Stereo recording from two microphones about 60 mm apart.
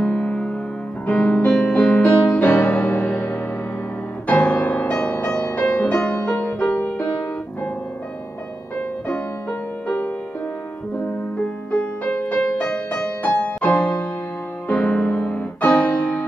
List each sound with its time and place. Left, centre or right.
0.0 s music: left
11.3 s music: centre
15.8 s piano: left